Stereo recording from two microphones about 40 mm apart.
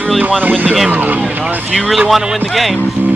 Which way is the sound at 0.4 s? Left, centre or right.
Right.